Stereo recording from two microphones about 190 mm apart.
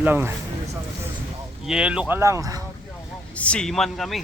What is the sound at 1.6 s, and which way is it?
Speech, 5° right (ahead or behind).